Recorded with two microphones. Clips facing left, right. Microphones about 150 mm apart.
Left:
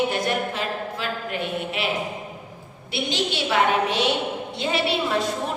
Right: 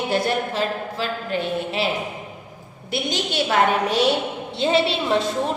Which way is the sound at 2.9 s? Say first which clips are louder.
Right 2 dB; 45° right (ahead or behind).